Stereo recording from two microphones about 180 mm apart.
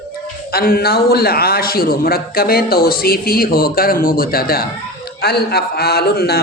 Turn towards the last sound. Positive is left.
turn(degrees=60)  # may be behind; listen again after turning